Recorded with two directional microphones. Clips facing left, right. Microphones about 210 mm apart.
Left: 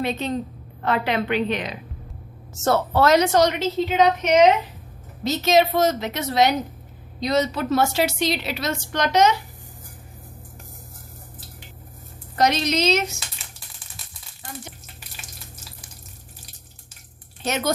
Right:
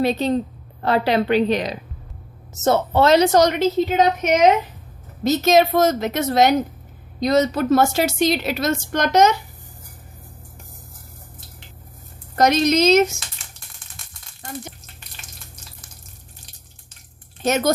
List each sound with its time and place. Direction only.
0.0 s a woman's voice: 35° right (ahead or behind)
2.6 s speech: 20° right (ahead or behind)
3.3 s a woman's voice: 45° right (ahead or behind)
12.4 s a woman's voice: 50° right (ahead or behind)
15.2 s frying: 5° left (ahead or behind)
17.4 s a woman's voice: 45° right (ahead or behind)